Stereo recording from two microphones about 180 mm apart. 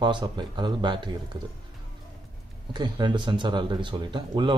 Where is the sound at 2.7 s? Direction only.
25° right (ahead or behind).